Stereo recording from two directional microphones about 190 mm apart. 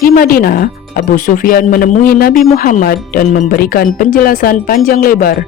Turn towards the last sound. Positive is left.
turn(degrees=45)  # may be behind; listen again after turning